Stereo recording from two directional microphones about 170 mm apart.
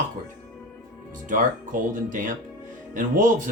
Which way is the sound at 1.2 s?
50° right (ahead or behind).